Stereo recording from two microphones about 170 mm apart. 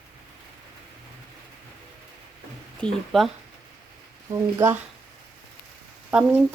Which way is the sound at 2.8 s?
Centre (ahead or behind).